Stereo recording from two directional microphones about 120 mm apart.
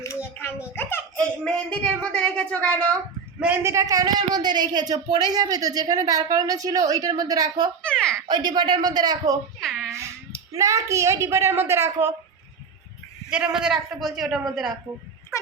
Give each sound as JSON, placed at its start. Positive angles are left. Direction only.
{"t": 0.0, "sound": "a sound", "side_deg": 20}
{"t": 1.2, "sound": "a woman's voice", "side_deg": 10}
{"t": 3.4, "sound": "speech", "side_deg": -15}
{"t": 3.7, "sound": "speech", "side_deg": -25}
{"t": 7.8, "sound": "a sound", "side_deg": 10}
{"t": 8.3, "sound": "speech", "side_deg": -35}
{"t": 9.6, "sound": "a sound", "side_deg": 5}
{"t": 9.9, "sound": "speech", "side_deg": -25}
{"t": 13.3, "sound": "a man's voice", "side_deg": -5}